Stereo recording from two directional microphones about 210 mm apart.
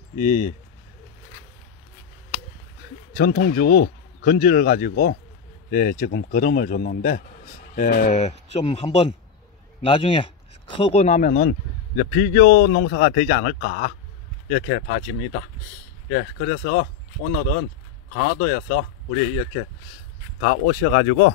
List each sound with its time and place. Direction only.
0.2 s speech: 40° left (ahead or behind)
3.2 s a man's voice: 50° left (ahead or behind)
20.3 s speech: 65° left (ahead or behind)